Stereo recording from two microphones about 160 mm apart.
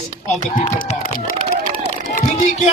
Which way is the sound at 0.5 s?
50° left (ahead or behind).